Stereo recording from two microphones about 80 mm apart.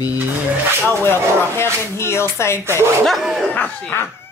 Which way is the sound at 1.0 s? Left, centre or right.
Left.